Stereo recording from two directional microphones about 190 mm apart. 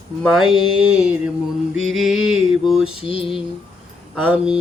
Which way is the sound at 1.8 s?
Centre (ahead or behind).